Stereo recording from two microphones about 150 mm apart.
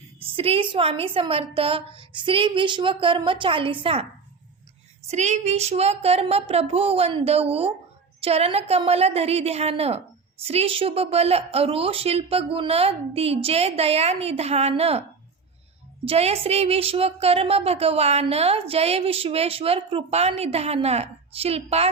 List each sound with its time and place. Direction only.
0.2 s a woman's voice: 40° right (ahead or behind)
5.0 s a woman's voice: 50° right (ahead or behind)
16.0 s a woman's voice: 40° right (ahead or behind)